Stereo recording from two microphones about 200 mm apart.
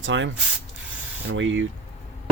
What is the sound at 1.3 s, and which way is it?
Speech, 75° right (ahead or behind).